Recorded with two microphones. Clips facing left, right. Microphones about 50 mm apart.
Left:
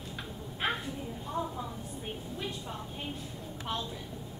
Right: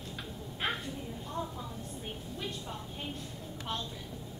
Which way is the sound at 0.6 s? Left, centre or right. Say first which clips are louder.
Left 2 dB; centre.